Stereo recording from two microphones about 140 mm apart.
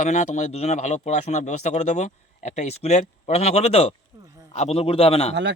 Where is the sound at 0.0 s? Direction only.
60° left (ahead or behind).